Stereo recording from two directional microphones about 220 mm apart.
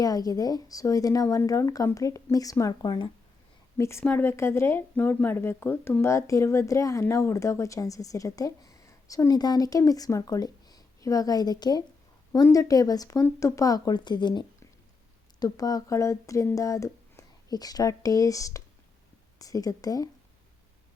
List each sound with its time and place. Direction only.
0.0 s speech: 15° left (ahead or behind)